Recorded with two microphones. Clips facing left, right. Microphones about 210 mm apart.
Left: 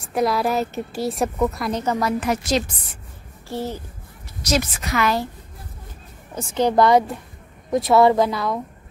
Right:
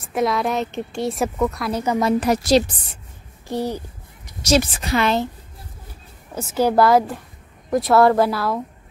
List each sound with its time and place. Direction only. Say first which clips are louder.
0.0 s a woman's voice: even; centre (ahead or behind)
2.1 s a woman's voice: right 5 dB; 35° right (ahead or behind)
3.4 s speech: right 3 dB; 15° right (ahead or behind)
4.4 s a woman's voice: right 4 dB; 30° right (ahead or behind)
6.3 s a woman's voice: right 1 dB; 10° right (ahead or behind)